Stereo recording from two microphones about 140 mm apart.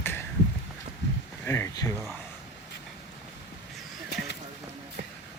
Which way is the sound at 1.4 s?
15° left (ahead or behind).